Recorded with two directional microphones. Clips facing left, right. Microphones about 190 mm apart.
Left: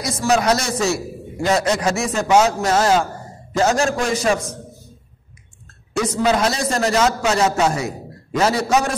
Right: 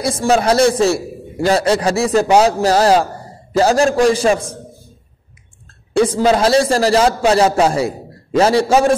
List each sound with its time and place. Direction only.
0.0 s a man's voice: 30° right (ahead or behind)
5.9 s a man's voice: 30° right (ahead or behind)